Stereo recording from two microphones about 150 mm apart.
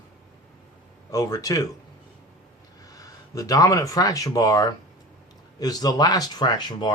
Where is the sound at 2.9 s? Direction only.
20° left (ahead or behind).